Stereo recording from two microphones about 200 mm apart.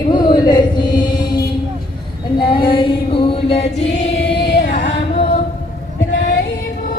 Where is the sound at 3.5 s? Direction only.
30° left (ahead or behind).